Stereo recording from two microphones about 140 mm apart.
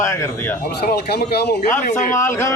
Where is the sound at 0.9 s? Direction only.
90° left.